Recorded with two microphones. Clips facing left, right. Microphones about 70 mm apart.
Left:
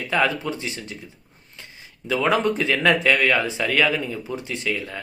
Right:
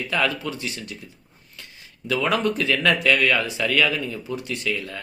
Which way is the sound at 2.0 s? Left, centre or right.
Left.